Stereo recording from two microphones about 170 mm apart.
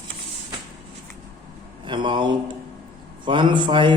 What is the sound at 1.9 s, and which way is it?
A man's voice, 30° right (ahead or behind).